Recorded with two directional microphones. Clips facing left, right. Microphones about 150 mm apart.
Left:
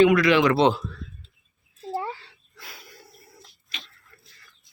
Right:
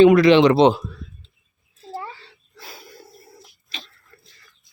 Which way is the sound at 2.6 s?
30° right (ahead or behind).